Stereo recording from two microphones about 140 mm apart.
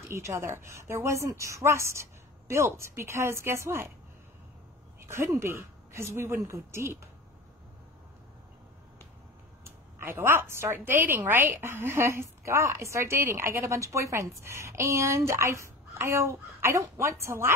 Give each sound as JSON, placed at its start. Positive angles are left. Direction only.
{"t": 0.1, "sound": "a woman's voice", "side_deg": -20}
{"t": 5.0, "sound": "a woman's voice", "side_deg": -20}
{"t": 9.7, "sound": "a woman's voice", "side_deg": -15}